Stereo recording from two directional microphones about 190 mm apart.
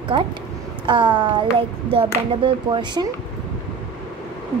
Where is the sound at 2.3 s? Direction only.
25° right (ahead or behind).